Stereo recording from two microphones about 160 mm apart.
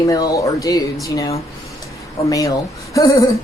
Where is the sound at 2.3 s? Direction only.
20° left (ahead or behind).